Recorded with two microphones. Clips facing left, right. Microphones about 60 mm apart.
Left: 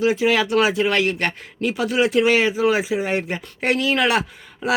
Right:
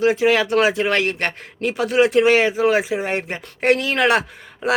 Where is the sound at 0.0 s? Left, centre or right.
Right.